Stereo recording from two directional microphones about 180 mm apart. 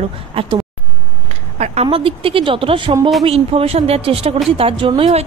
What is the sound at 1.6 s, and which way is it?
A woman's voice, 35° right (ahead or behind).